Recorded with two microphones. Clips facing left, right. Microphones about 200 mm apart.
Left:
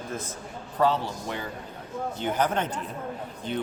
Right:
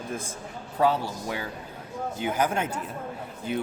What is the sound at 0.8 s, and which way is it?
Speech, 10° right (ahead or behind).